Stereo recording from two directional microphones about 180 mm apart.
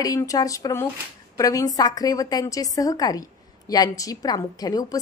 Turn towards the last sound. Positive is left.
turn(degrees=20)  # may be behind; listen again after turning